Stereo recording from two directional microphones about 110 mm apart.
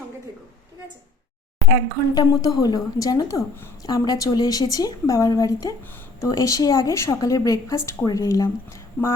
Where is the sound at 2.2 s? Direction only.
35° left (ahead or behind).